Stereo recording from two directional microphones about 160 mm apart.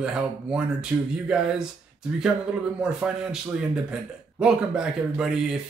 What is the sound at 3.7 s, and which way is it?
Speech, 5° right (ahead or behind).